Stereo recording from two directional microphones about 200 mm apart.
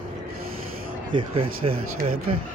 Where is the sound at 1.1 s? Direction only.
25° right (ahead or behind).